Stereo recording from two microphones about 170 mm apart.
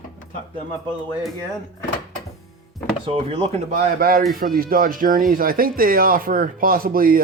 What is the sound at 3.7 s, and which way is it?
Speech, 55° right (ahead or behind).